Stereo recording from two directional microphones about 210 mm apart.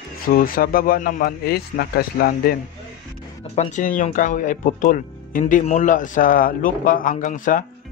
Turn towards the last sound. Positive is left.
turn(degrees=40)  # may be behind; listen again after turning